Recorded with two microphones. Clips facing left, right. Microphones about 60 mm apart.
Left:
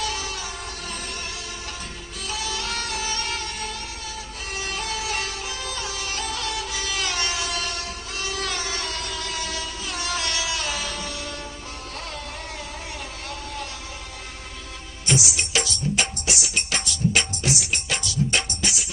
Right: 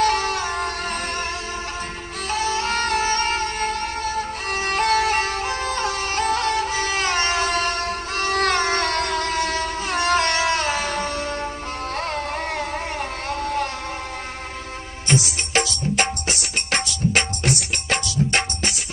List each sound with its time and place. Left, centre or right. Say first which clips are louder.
0.0 s music: right 10 dB; right
2.3 s music: right 8 dB; right
15.0 s music: right 2 dB; right